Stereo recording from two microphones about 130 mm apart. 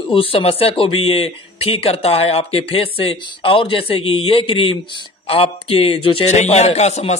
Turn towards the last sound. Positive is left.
turn(degrees=60)  # may be behind; listen again after turning